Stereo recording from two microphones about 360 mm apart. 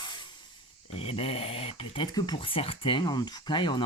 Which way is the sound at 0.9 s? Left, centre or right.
Centre.